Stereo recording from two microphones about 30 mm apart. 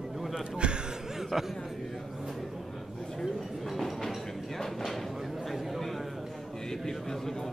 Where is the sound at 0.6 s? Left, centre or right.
Right.